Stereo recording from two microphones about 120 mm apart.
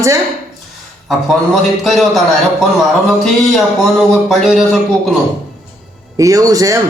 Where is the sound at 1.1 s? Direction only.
Centre (ahead or behind).